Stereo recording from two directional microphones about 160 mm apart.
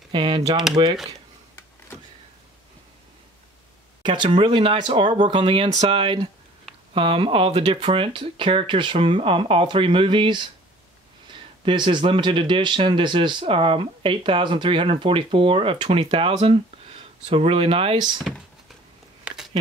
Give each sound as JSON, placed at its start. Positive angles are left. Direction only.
{"t": 0.1, "sound": "speech", "side_deg": -30}
{"t": 4.0, "sound": "speech", "side_deg": -30}
{"t": 11.6, "sound": "speech", "side_deg": -30}
{"t": 18.3, "sound": "speech", "side_deg": -5}
{"t": 19.2, "sound": "a sound", "side_deg": -5}